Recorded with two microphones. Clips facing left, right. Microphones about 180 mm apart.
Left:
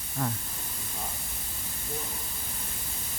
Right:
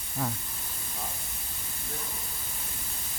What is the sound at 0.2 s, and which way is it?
Speech, 5° right (ahead or behind).